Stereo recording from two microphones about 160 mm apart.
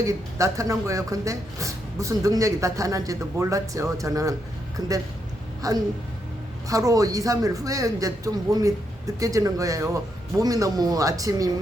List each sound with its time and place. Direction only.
0.0 s a man's voice: 20° right (ahead or behind)